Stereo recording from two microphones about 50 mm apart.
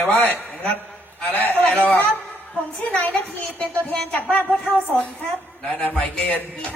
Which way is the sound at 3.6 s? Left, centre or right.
Left.